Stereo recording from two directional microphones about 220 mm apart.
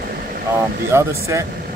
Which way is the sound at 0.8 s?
10° right (ahead or behind).